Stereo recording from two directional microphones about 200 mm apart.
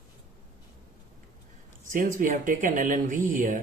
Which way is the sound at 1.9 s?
40° right (ahead or behind).